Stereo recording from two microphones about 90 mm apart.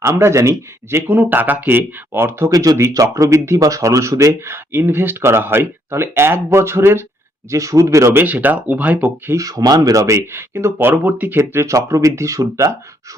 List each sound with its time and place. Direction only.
0.0 s speech: 30° right (ahead or behind)
2.5 s speech: 40° right (ahead or behind)
8.2 s speech: 20° right (ahead or behind)
9.3 s speech: 40° right (ahead or behind)